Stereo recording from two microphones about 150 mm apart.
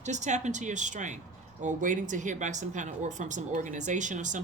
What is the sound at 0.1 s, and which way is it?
A woman's voice, 50° right (ahead or behind).